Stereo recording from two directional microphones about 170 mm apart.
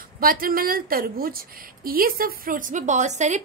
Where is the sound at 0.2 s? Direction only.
60° right (ahead or behind).